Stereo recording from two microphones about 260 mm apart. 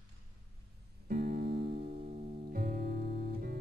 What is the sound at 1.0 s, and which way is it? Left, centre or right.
Music, right.